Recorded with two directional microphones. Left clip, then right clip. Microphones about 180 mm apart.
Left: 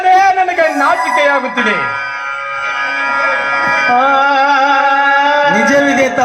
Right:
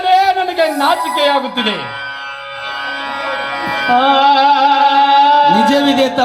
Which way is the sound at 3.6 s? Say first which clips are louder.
Left 1 dB; 20° right (ahead or behind).